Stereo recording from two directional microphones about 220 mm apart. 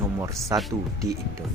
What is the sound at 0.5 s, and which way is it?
Speech, 15° right (ahead or behind).